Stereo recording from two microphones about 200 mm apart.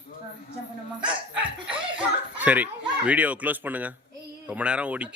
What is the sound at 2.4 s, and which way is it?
Speech, 5° right (ahead or behind).